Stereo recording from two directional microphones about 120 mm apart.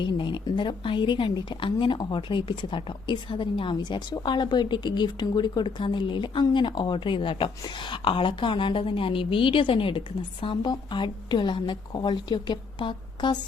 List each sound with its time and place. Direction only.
0.0 s a woman's voice: 40° left (ahead or behind)